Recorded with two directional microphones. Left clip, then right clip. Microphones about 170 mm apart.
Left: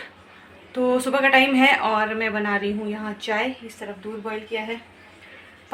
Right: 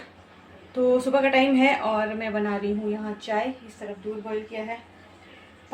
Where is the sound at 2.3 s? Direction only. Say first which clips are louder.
Left 3 dB; 20° left (ahead or behind).